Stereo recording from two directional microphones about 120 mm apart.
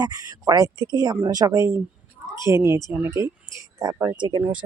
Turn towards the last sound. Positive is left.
turn(degrees=-40)  # may be behind; listen again after turning